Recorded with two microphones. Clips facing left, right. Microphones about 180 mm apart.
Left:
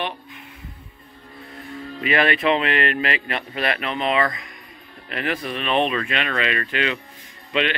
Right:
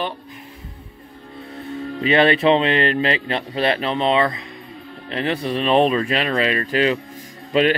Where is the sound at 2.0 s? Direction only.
30° right (ahead or behind).